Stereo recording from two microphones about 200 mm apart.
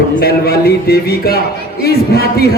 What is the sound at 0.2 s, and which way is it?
A man's voice, 50° left (ahead or behind).